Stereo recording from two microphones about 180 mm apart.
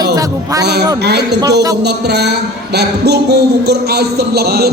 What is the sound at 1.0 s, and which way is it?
A man's voice, 65° right (ahead or behind).